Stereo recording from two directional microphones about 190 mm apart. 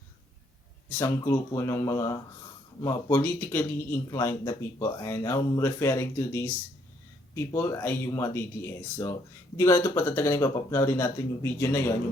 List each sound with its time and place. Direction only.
0.9 s speech: 15° left (ahead or behind)